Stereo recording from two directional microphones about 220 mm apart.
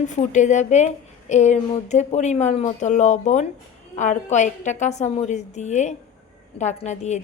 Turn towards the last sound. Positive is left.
turn(degrees=30)  # may be behind; listen again after turning